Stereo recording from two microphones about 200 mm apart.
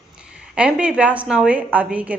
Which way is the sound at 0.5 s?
5° right (ahead or behind).